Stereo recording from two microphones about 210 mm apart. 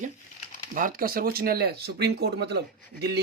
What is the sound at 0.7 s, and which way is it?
Speech, 40° right (ahead or behind).